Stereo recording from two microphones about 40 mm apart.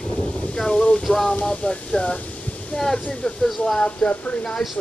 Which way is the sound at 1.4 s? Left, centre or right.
Left.